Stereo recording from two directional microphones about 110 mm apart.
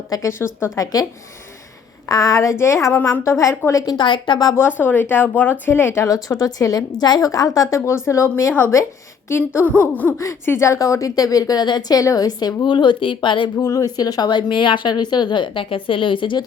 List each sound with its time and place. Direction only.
0.1 s speech: 25° left (ahead or behind)
2.0 s a woman's voice: 30° left (ahead or behind)
3.9 s a woman's voice: 45° left (ahead or behind)
4.5 s a woman's voice: 20° left (ahead or behind)
9.8 s a sound: 15° left (ahead or behind)
10.2 s a woman's voice: 25° left (ahead or behind); by 13.7 s 45° left (ahead or behind)
13.7 s a woman's voice: 35° left (ahead or behind)